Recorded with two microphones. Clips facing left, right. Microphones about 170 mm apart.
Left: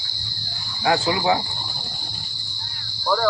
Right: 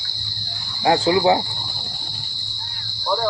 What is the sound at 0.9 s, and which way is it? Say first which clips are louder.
Speech: right 4 dB; 35° right (ahead or behind).